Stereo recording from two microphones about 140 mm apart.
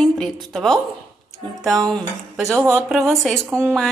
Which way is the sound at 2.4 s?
15° right (ahead or behind).